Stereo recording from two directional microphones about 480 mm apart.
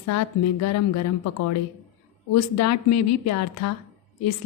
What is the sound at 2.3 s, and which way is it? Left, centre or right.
A woman's voice, left.